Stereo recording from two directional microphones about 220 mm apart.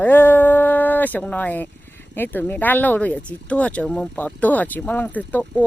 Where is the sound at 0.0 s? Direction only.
10° left (ahead or behind).